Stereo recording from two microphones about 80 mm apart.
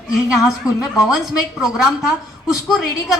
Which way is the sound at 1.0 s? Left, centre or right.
Centre.